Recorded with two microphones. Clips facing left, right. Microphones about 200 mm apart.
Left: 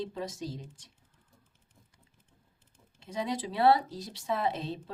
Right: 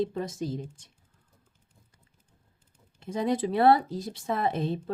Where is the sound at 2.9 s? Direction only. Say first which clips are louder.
Right 6 dB; 50° right (ahead or behind).